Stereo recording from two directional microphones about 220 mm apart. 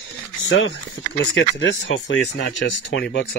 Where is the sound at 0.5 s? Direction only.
55° left (ahead or behind).